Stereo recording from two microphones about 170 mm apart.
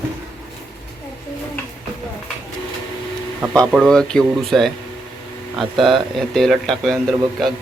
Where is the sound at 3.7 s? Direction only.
Centre (ahead or behind).